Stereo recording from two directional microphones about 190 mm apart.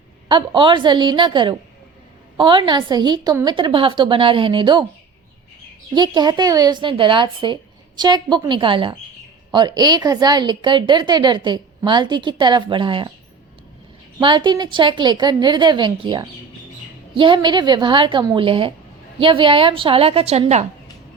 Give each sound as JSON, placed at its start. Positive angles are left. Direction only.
{"t": 0.3, "sound": "a woman's voice", "side_deg": -25}
{"t": 5.9, "sound": "a woman's voice", "side_deg": -20}
{"t": 14.2, "sound": "a woman's voice", "side_deg": -25}